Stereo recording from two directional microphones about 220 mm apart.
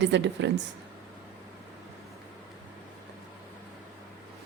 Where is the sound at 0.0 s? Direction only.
55° right (ahead or behind).